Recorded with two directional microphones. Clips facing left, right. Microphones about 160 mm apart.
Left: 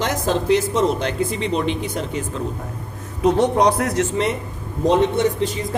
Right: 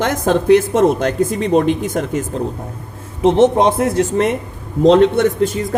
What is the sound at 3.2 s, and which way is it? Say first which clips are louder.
Speech: right 4 dB; 25° right (ahead or behind).